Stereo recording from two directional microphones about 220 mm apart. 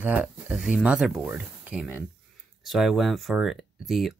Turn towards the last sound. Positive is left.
turn(degrees=0)  # may be behind; listen again after turning